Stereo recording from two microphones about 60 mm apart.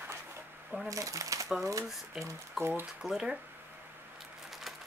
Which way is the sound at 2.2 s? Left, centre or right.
Centre.